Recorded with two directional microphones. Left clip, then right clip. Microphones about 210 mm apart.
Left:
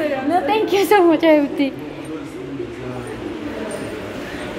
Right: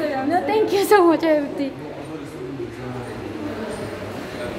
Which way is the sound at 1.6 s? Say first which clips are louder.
Left 6 dB; 5° left (ahead or behind).